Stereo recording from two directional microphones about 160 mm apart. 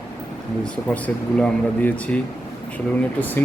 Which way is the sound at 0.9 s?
10° left (ahead or behind).